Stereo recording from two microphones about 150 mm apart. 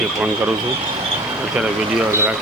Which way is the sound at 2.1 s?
15° right (ahead or behind).